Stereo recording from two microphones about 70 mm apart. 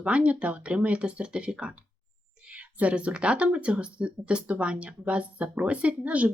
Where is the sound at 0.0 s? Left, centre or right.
Centre.